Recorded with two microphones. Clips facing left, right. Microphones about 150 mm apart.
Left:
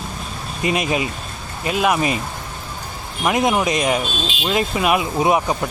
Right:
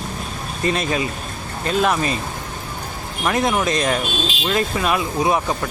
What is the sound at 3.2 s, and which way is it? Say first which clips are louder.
Speech: left 2 dB; 20° left (ahead or behind).